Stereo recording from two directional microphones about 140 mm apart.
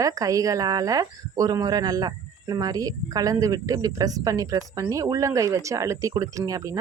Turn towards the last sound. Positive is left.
turn(degrees=-25)  # may be behind; listen again after turning